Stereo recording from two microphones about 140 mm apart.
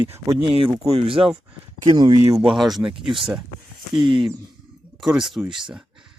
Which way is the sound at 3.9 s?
35° right (ahead or behind).